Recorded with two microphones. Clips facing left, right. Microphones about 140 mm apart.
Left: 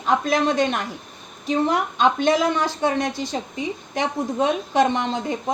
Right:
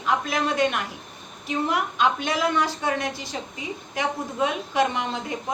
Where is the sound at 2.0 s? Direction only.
30° left (ahead or behind).